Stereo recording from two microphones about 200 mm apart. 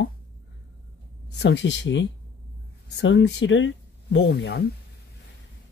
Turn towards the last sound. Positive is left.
turn(degrees=55)  # may be behind; listen again after turning